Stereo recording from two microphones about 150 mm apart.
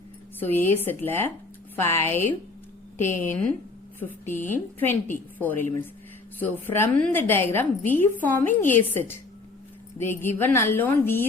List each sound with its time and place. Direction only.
0.3 s a woman's voice: 15° left (ahead or behind)
3.2 s a woman's voice: 10° left (ahead or behind)